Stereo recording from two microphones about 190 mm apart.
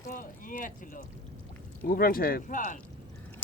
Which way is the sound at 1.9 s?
50° left (ahead or behind).